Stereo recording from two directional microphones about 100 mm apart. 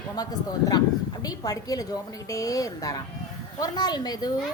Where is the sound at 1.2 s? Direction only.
40° left (ahead or behind).